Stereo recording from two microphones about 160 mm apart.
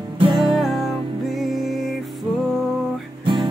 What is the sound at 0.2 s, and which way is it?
Music, 30° right (ahead or behind).